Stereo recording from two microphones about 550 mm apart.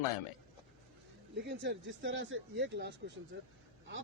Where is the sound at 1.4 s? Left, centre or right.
Centre.